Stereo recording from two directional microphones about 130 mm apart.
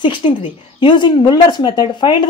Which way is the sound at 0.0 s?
40° left (ahead or behind).